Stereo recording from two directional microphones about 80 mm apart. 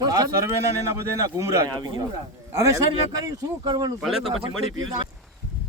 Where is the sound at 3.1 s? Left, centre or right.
Right.